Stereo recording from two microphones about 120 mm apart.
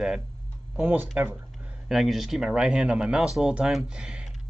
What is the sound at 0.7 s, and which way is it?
Speech, 15° right (ahead or behind).